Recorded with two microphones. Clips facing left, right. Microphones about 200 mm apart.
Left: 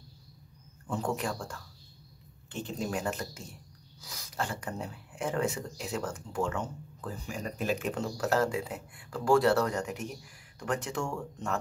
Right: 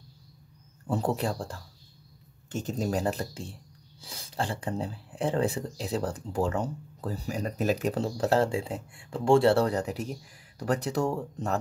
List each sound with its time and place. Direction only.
0.8 s speech: 35° right (ahead or behind)